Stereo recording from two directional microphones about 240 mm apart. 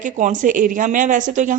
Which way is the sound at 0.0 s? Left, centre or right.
Right.